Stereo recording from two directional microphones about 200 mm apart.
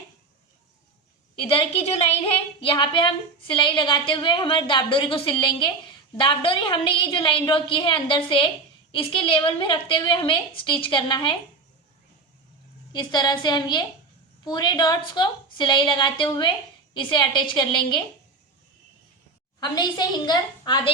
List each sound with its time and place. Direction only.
1.4 s a woman's voice: 30° left (ahead or behind)
12.9 s a woman's voice: 20° left (ahead or behind)
19.5 s a woman's voice: 20° left (ahead or behind)